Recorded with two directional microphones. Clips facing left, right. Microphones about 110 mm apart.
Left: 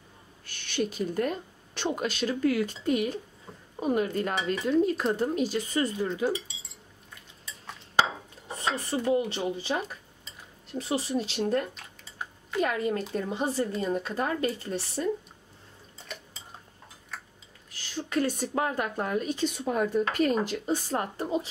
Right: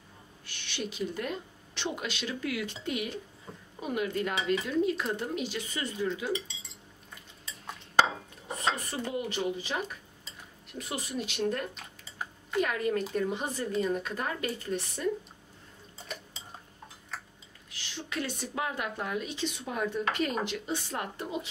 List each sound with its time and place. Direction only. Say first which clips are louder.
0.5 s speech: left 7 dB; 45° left (ahead or behind)
8.7 s speech: left 8 dB; 30° left (ahead or behind)
11.7 s bathtub: even; centre (ahead or behind)
12.6 s speech: left 2 dB; 30° left (ahead or behind)
17.6 s speech: left 5 dB; 40° left (ahead or behind)